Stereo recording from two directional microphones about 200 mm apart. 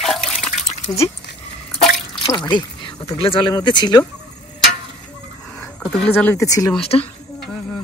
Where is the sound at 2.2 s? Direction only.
20° left (ahead or behind).